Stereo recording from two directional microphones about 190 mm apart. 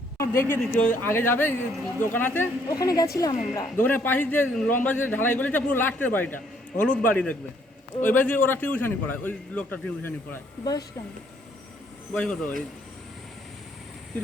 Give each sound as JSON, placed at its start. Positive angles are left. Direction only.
{"t": 0.2, "sound": "a man's voice", "side_deg": 10}
{"t": 10.6, "sound": "speech", "side_deg": 20}
{"t": 12.1, "sound": "speech", "side_deg": 5}